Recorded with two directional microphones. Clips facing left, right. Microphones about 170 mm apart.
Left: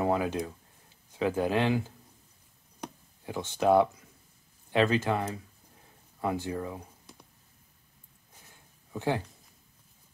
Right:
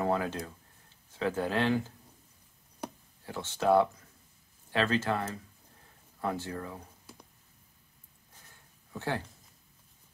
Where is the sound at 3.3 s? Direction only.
15° left (ahead or behind).